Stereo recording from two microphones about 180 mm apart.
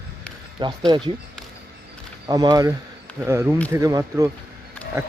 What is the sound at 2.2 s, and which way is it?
Speech, 20° right (ahead or behind).